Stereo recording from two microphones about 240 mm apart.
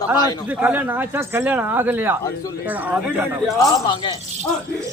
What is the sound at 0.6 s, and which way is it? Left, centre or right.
Speech, centre.